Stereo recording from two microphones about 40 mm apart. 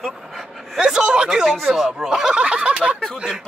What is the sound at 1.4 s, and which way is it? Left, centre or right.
Speech, centre.